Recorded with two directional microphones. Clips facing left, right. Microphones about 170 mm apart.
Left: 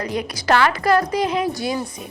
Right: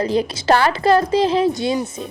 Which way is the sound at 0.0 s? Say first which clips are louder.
Right 6 dB; 30° right (ahead or behind).